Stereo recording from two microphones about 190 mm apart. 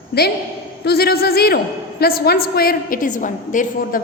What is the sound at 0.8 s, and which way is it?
A woman's voice, 55° left (ahead or behind).